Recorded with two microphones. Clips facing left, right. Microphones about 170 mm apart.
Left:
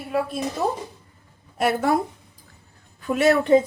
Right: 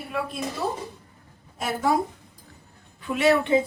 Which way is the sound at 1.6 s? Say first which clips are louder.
Left 5 dB; 65° left (ahead or behind).